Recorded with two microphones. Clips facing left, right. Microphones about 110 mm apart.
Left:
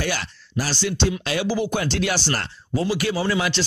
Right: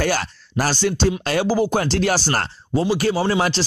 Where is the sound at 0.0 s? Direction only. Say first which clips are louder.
Right 5 dB; 50° right (ahead or behind).